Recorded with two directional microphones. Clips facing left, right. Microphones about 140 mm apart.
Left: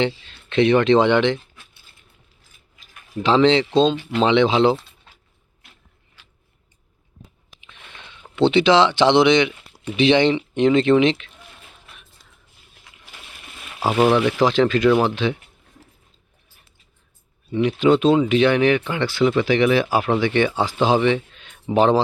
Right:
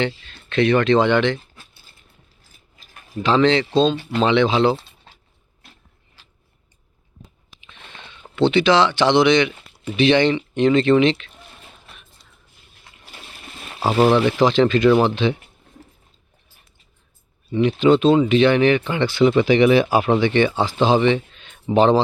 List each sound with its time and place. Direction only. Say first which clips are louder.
0.3 s speech: left 1 dB; 20° left (ahead or behind)
2.7 s mechanisms: right 2 dB; 35° right (ahead or behind)
3.2 s speech: left 1 dB; 25° left (ahead or behind)
8.4 s speech: left 1 dB; 25° left (ahead or behind)
13.7 s speech: right 1 dB; 5° left (ahead or behind)
17.5 s speech: right 1 dB; 10° left (ahead or behind)